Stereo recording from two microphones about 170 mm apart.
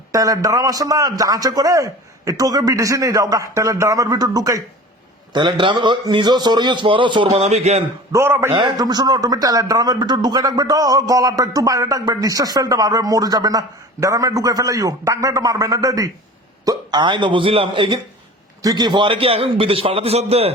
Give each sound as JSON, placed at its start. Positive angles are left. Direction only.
{"t": 0.1, "sound": "a man's voice", "side_deg": -20}
{"t": 8.1, "sound": "a man's voice", "side_deg": -15}
{"t": 8.5, "sound": "a man's voice", "side_deg": -25}